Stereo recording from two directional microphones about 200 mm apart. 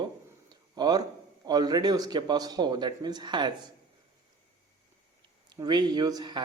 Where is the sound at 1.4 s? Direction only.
20° right (ahead or behind).